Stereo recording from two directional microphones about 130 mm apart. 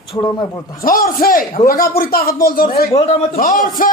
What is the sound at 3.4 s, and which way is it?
Speech, 90° left.